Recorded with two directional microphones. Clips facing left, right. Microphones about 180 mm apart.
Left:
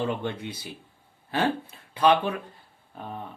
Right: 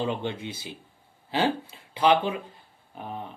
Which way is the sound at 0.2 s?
25° right (ahead or behind).